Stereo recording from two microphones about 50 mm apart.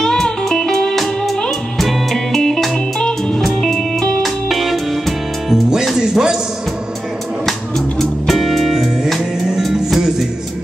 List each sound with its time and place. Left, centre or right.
0.0 s music: centre
3.0 s music: centre
3.3 s music: centre
5.9 s a sound: centre
8.0 s music: centre